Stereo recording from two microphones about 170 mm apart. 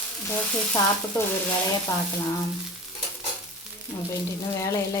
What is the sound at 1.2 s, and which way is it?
Stir, 25° left (ahead or behind).